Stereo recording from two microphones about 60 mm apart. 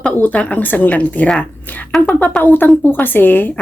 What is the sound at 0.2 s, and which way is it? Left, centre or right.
A woman's voice, left.